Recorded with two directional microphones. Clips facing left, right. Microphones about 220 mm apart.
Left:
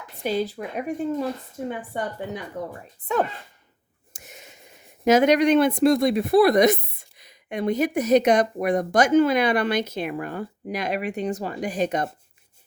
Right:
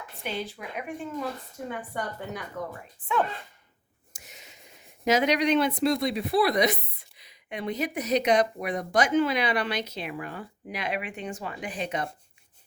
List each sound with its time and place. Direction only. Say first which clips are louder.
0.2 s speech: left 9 dB; 40° left (ahead or behind)
1.9 s speech: left 4 dB; 20° left (ahead or behind)
2.6 s speech: left 3 dB; 35° left (ahead or behind)
4.1 s a sound: left 5 dB; 50° left (ahead or behind)
5.0 s speech: left 6 dB; 50° left (ahead or behind)